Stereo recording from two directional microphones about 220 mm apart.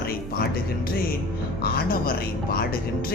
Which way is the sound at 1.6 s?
45° left (ahead or behind).